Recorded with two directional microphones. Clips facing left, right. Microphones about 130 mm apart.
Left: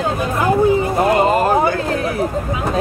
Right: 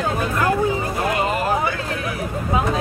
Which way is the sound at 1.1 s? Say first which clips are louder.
Left 7 dB; 40° left (ahead or behind).